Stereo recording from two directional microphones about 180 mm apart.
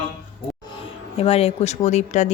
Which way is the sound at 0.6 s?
25° left (ahead or behind).